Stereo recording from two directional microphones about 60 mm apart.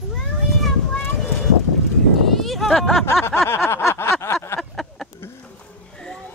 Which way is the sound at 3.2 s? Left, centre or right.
Left.